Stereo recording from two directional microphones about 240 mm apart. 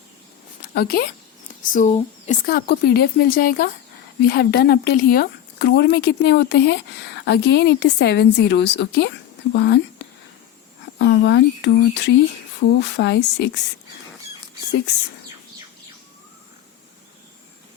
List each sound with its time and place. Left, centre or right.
0.7 s a woman's voice: left
1.7 s a woman's voice: left
10.9 s speech: left